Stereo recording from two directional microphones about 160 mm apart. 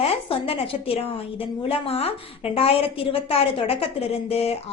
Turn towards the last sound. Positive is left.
turn(degrees=40)  # may be behind; listen again after turning